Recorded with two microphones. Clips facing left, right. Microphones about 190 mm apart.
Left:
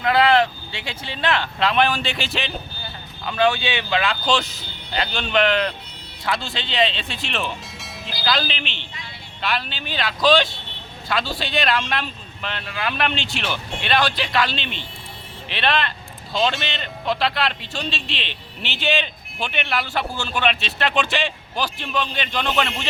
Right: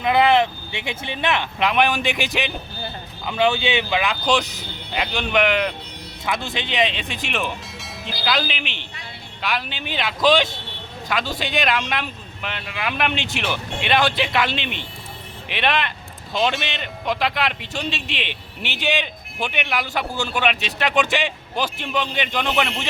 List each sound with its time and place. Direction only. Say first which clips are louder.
0.0 s speech: even; 20° right (ahead or behind)
7.8 s music: right 2 dB; centre (ahead or behind)
8.4 s speech: right 1 dB; 15° right (ahead or behind)